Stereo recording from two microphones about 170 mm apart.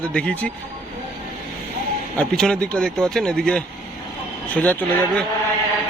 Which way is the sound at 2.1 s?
5° left (ahead or behind).